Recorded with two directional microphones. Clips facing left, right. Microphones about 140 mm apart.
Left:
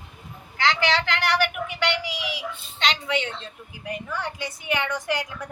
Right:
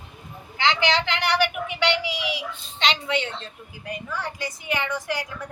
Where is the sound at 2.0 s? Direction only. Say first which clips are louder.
Right 3 dB; 45° left (ahead or behind).